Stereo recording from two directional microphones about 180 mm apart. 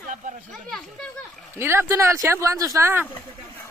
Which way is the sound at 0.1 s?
40° right (ahead or behind).